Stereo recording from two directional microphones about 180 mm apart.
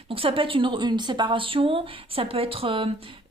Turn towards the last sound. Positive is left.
turn(degrees=-30)  # may be behind; listen again after turning